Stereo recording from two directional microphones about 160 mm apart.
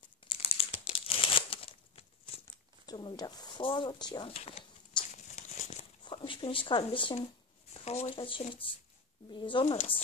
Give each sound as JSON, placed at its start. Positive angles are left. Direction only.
{"t": 0.2, "sound": "crumpling", "side_deg": 35}
{"t": 2.9, "sound": "a woman's voice", "side_deg": 25}
{"t": 4.3, "sound": "speech", "side_deg": 40}
{"t": 5.1, "sound": "tearing", "side_deg": 45}
{"t": 6.0, "sound": "speech", "side_deg": 30}